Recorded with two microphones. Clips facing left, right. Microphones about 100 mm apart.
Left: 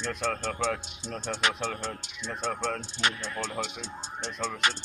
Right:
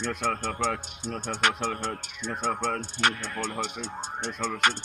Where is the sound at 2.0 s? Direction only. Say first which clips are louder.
Right 3 dB; 55° right (ahead or behind).